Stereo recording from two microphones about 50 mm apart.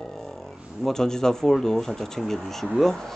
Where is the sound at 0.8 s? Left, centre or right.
Centre.